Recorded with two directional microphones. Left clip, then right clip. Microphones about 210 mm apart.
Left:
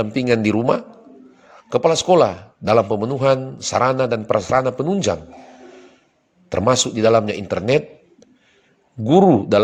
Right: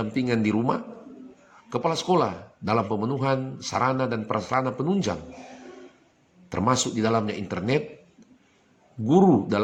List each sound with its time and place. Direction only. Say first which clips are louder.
0.0 s a man's voice: left 8 dB; 35° left (ahead or behind)
6.5 s a man's voice: left 7 dB; 35° left (ahead or behind)
9.0 s a man's voice: left 7 dB; 35° left (ahead or behind)